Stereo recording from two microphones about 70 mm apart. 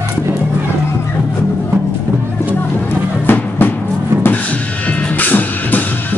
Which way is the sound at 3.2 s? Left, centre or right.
Left.